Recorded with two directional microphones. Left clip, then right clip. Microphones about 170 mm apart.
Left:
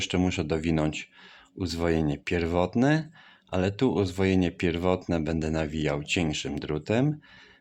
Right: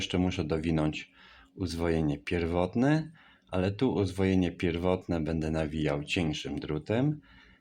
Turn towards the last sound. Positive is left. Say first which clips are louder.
# left 3 dB
turn(degrees=20)  # may be behind; listen again after turning